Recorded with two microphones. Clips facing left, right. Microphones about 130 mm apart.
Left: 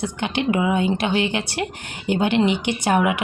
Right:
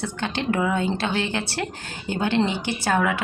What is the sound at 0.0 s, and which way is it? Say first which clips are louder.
A woman's voice: left 4 dB; 15° left (ahead or behind).